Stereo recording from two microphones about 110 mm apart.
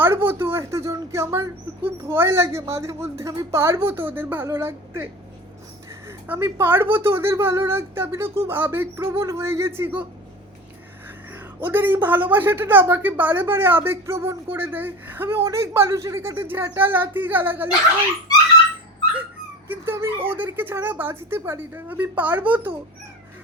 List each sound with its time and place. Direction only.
0.0 s a sound: 20° right (ahead or behind)
1.1 s speech: 25° right (ahead or behind)
6.1 s speech: 20° right (ahead or behind)
11.6 s speech: 20° right (ahead or behind)
19.6 s speech: 20° right (ahead or behind)